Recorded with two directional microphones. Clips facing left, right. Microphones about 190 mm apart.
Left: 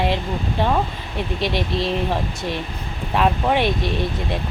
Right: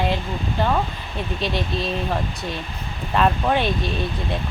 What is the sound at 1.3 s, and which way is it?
Speech, 20° left (ahead or behind).